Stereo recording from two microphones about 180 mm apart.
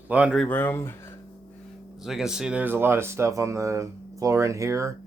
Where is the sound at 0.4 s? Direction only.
10° left (ahead or behind).